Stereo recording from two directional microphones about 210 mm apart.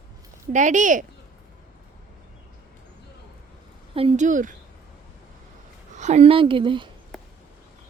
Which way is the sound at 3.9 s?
30° right (ahead or behind).